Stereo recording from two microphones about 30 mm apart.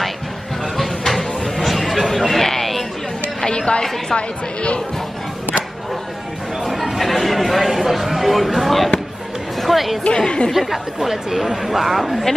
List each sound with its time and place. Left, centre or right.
0.7 s a sound: centre
2.4 s chatter: centre
3.4 s a sound: left
7.0 s speech: centre
10.0 s speech: left
10.7 s speech: centre